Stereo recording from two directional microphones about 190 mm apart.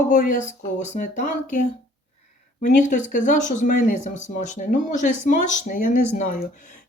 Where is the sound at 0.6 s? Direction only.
40° left (ahead or behind).